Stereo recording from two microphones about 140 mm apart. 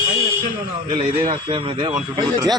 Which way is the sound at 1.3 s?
30° right (ahead or behind).